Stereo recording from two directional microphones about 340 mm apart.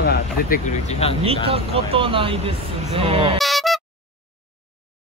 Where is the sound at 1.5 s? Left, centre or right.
Centre.